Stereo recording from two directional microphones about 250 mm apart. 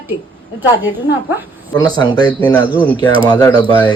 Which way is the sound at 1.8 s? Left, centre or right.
Centre.